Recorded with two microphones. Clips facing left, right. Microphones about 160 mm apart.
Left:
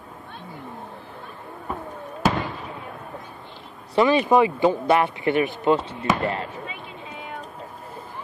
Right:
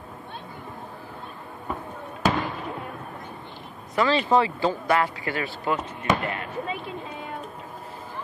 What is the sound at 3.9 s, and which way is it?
Speech, 15° left (ahead or behind).